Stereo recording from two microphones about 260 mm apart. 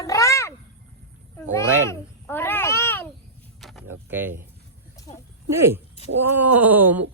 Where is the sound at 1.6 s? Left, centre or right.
Centre.